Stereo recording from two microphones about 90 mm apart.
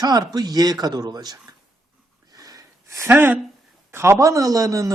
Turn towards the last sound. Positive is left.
turn(degrees=-40)  # may be behind; listen again after turning